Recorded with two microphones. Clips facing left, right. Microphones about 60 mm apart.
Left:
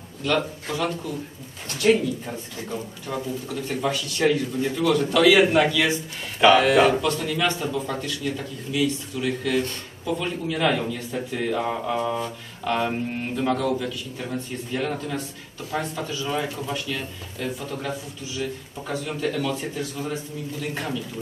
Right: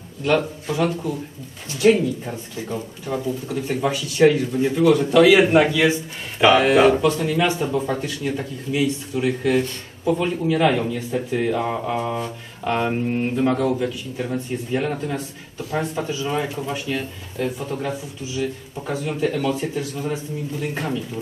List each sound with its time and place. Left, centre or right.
0.2 s speech: right
1.8 s speech: centre
3.4 s a man's voice: centre
19.6 s speech: centre